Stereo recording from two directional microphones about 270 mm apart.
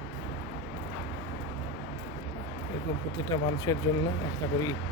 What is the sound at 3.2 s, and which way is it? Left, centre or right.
Speech, centre.